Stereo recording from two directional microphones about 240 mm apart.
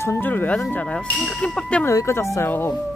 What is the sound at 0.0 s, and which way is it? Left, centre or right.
Speech, centre.